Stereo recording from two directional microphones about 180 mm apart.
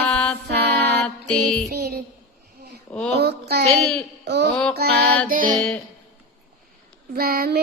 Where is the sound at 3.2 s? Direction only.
65° right (ahead or behind).